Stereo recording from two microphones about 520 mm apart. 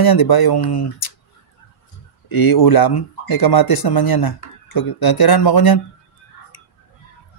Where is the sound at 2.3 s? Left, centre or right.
Left.